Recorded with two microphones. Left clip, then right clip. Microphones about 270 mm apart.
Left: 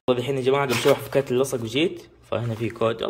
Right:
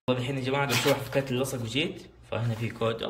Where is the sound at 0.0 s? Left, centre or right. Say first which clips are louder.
Left 8 dB; left.